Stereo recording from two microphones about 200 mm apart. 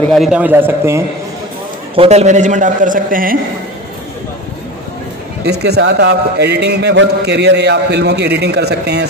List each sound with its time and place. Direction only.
0.1 s a man's voice: centre (ahead or behind)
2.0 s a man's voice: 35° right (ahead or behind)
5.5 s a man's voice: 55° right (ahead or behind)